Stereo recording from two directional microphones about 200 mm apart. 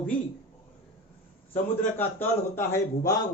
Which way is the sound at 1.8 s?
10° left (ahead or behind).